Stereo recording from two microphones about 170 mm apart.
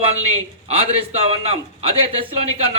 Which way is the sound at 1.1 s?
35° right (ahead or behind).